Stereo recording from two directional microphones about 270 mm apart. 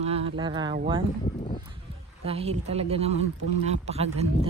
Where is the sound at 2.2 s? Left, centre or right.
Right.